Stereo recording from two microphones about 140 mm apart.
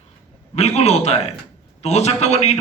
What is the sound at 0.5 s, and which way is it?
A man's voice, 50° left (ahead or behind).